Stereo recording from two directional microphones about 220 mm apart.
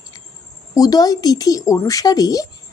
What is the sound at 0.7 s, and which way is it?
Speech, 15° left (ahead or behind).